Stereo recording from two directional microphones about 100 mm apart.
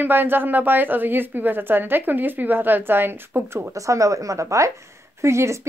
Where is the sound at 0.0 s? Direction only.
20° right (ahead or behind).